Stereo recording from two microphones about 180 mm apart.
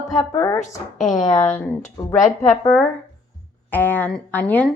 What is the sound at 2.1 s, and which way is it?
Speech, 45° left (ahead or behind).